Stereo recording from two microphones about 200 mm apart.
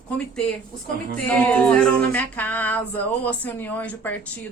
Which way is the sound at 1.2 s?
10° left (ahead or behind).